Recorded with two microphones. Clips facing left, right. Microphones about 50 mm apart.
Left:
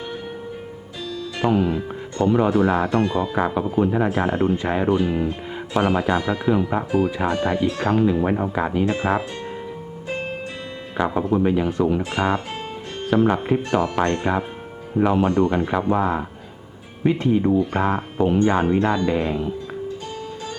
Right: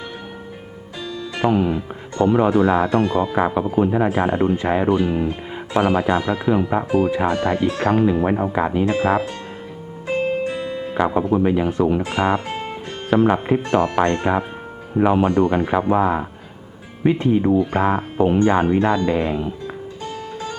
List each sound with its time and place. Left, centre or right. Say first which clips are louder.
1.0 s music: right 2 dB; centre
2.3 s speech: right 2 dB; centre
10.9 s speech: right 2 dB; centre
12.0 s speech: right 2 dB; right